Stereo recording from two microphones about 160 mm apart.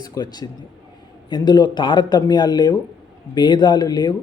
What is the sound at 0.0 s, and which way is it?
Speech, 25° left (ahead or behind).